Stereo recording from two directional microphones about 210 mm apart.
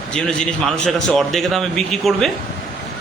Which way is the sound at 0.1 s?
5° left (ahead or behind).